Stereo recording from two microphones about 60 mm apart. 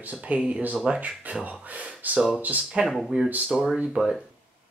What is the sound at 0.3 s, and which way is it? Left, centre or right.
Speech, right.